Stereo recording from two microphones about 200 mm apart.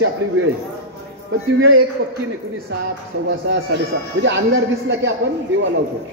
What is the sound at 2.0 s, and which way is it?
Speech, 70° right (ahead or behind).